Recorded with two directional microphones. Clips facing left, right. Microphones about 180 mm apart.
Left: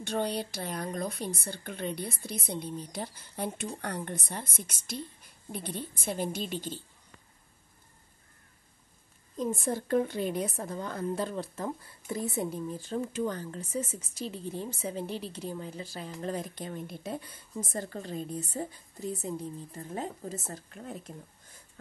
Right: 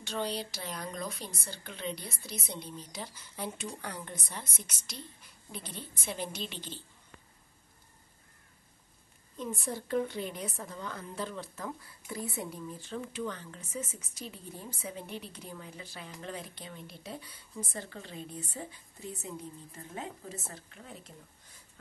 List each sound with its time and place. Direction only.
0.0 s a woman's voice: 55° left (ahead or behind)
9.4 s a woman's voice: 45° left (ahead or behind)
11.5 s speech: 30° left (ahead or behind)
12.7 s speech: 40° left (ahead or behind)